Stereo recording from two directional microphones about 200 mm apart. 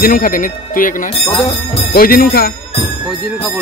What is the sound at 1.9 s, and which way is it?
Speech, 45° left (ahead or behind).